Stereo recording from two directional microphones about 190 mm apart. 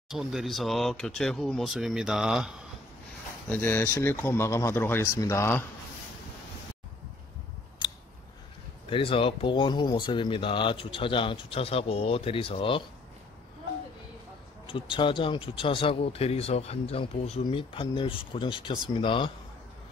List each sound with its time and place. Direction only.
0.1 s speech: centre (ahead or behind)
3.4 s speech: 10° left (ahead or behind)
8.9 s speech: 30° left (ahead or behind)
14.7 s speech: 25° left (ahead or behind)